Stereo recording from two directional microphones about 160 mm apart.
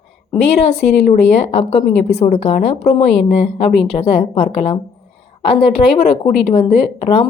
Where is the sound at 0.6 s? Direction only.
40° left (ahead or behind).